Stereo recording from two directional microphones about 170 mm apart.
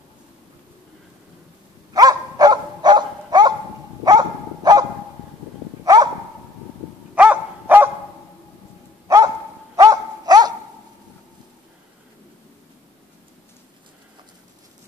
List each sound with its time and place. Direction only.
2.0 s dog: 20° right (ahead or behind)
7.2 s dog: 10° right (ahead or behind)
9.0 s dog: 20° right (ahead or behind)